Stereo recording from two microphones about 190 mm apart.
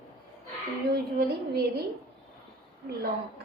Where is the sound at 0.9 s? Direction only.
55° right (ahead or behind).